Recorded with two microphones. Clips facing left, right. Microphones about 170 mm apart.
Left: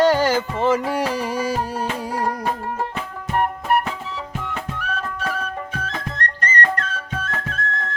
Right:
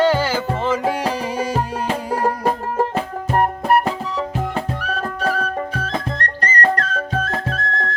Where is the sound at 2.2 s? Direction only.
40° right (ahead or behind).